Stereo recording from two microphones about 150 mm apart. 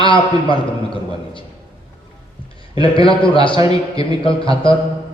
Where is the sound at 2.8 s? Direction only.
35° left (ahead or behind).